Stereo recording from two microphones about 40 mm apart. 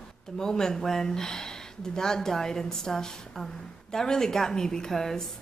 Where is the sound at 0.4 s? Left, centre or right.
Centre.